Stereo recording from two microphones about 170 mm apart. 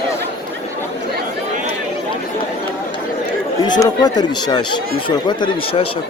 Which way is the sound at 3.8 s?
25° left (ahead or behind).